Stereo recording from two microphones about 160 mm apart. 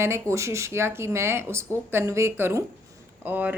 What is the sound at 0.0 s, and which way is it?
A woman's voice, 15° right (ahead or behind).